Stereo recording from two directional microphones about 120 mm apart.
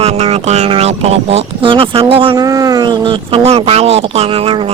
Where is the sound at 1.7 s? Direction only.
50° right (ahead or behind).